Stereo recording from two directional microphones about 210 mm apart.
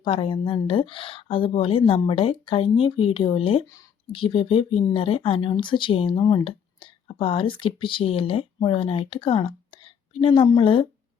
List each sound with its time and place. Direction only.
0.0 s speech: 25° left (ahead or behind)